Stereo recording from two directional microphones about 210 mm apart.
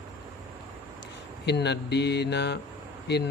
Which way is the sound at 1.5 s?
55° left (ahead or behind).